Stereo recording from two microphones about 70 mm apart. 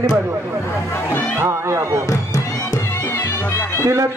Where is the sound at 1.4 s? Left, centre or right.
Right.